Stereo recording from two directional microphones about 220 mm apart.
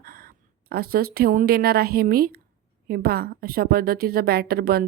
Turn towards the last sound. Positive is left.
turn(degrees=-45)  # may be behind; listen again after turning